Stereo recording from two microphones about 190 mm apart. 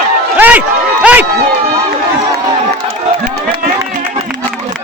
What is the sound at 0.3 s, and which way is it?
Run, 10° right (ahead or behind).